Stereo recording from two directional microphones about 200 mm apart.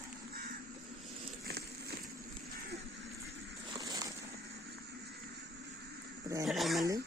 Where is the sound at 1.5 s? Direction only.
55° right (ahead or behind).